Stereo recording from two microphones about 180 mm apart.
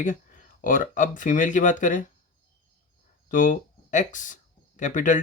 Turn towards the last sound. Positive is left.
turn(degrees=45)  # may be behind; listen again after turning